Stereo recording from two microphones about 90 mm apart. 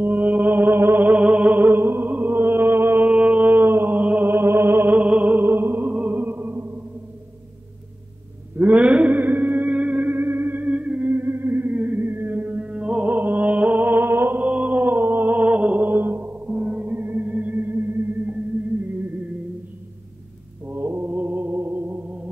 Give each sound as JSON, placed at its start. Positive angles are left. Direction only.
{"t": 0.0, "sound": "music", "side_deg": -20}
{"t": 8.5, "sound": "music", "side_deg": -15}
{"t": 20.6, "sound": "music", "side_deg": -25}